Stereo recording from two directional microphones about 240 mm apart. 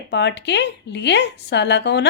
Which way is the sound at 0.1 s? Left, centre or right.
Left.